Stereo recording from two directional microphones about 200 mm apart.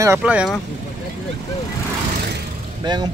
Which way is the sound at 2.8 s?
20° right (ahead or behind).